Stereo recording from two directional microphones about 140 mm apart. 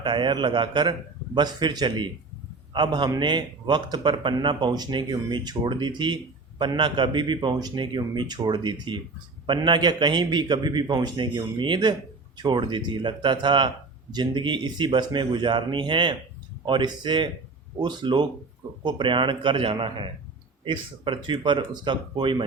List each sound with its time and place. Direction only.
0.0 s speech: 35° right (ahead or behind)